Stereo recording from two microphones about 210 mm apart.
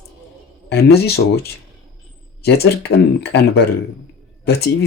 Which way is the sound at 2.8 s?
50° left (ahead or behind).